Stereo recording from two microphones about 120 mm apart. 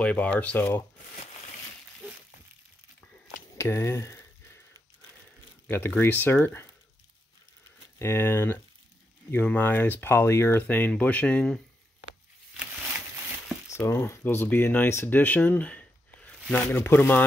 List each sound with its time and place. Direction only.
0.0 s speech: 10° left (ahead or behind)
3.5 s speech: 25° left (ahead or behind)
5.7 s speech: 20° left (ahead or behind)
8.0 s speech: 20° left (ahead or behind)
13.7 s speech: 20° left (ahead or behind)
16.7 s speech: 20° left (ahead or behind)